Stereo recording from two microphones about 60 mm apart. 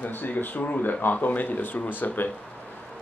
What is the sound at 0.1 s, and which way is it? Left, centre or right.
Speech, left.